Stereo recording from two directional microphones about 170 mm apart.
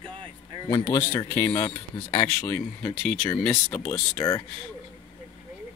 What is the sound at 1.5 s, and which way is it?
Speech, 30° left (ahead or behind).